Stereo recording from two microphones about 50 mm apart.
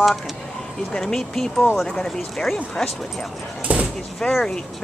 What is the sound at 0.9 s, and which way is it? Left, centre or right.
Speech, centre.